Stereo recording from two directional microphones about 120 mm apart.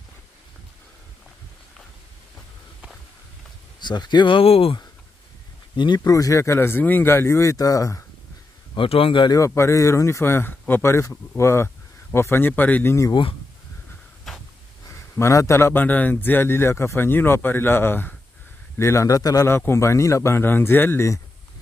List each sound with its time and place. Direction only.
3.8 s speech: 35° left (ahead or behind)
5.8 s a man's voice: 35° left (ahead or behind)
8.7 s a man's voice: 50° left (ahead or behind)
9.5 s a man's voice: 25° left (ahead or behind)
15.1 s a man's voice: 25° left (ahead or behind)